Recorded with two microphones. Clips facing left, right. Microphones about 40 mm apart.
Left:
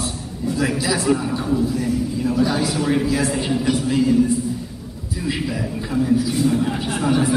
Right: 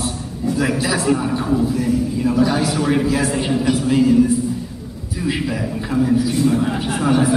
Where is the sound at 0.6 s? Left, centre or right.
Centre.